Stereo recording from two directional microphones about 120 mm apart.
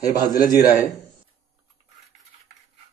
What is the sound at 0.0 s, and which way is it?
Speech, 35° left (ahead or behind).